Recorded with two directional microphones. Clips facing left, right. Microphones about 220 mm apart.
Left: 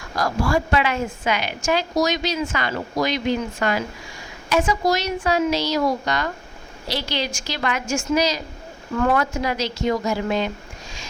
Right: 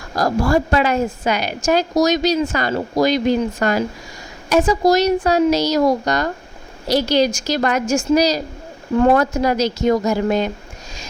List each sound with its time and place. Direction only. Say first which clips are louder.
0.2 s a woman's voice: right 5 dB; 40° right (ahead or behind)